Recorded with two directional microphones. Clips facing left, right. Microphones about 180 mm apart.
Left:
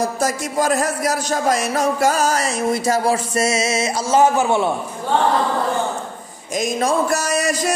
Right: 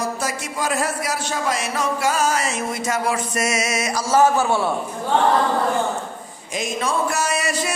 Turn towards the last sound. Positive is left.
turn(degrees=40)  # may be behind; listen again after turning